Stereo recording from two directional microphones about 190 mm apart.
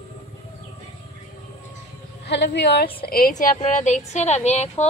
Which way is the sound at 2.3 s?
65° left (ahead or behind).